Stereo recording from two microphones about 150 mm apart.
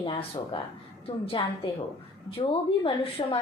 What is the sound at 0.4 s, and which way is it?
A woman's voice, 30° left (ahead or behind).